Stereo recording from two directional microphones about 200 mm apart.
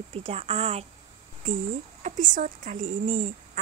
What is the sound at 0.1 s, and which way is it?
Speech, 30° right (ahead or behind).